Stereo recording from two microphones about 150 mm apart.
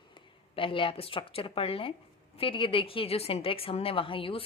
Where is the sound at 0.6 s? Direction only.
35° left (ahead or behind).